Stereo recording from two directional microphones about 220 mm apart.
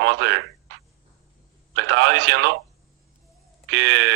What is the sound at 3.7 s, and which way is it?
Speech, 55° right (ahead or behind).